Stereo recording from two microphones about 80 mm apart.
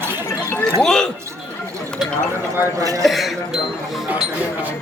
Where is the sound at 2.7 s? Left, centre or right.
Right.